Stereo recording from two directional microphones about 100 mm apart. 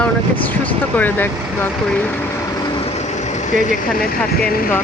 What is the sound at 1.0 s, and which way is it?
Speech, 20° left (ahead or behind).